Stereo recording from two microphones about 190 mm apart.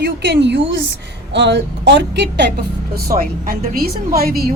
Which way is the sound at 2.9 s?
55° right (ahead or behind).